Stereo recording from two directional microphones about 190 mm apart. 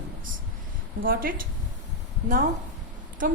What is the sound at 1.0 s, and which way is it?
Speech, 50° right (ahead or behind).